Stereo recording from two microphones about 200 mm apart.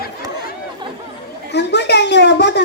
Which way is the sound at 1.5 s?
60° left (ahead or behind).